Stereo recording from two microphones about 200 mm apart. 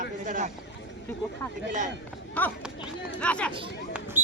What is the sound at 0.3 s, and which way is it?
Speech, 40° right (ahead or behind).